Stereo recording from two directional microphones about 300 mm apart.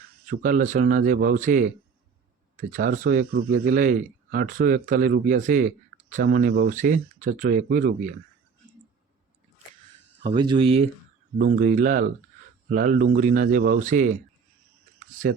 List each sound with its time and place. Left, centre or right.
0.3 s speech: right
10.2 s speech: centre